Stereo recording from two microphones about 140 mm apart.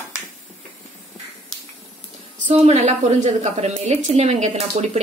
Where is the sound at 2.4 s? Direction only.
50° right (ahead or behind).